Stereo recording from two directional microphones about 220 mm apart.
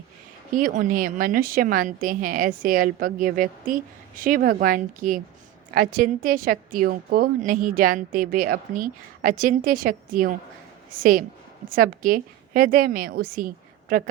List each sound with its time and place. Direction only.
0.5 s a woman's voice: 35° right (ahead or behind)